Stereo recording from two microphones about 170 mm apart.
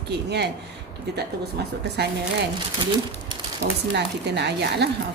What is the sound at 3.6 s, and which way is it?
A woman's voice, 85° right.